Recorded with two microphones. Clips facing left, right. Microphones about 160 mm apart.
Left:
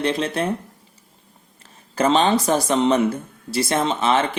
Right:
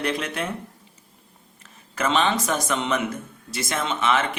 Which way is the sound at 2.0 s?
35° left (ahead or behind).